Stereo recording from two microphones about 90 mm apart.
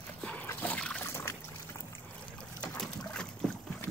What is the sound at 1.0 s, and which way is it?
Trickle, 30° left (ahead or behind).